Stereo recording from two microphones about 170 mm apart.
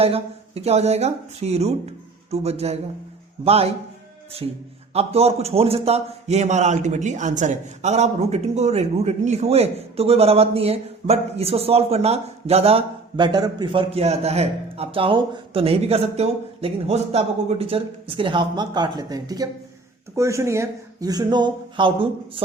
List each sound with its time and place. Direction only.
0.0 s a man's voice: 35° right (ahead or behind)